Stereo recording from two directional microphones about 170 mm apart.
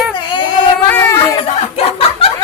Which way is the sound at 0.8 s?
15° left (ahead or behind).